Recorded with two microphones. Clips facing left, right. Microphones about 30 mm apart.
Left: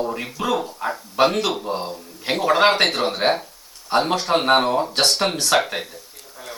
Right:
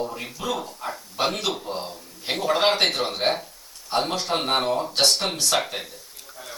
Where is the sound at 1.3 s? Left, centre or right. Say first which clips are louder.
Left 5 dB; centre.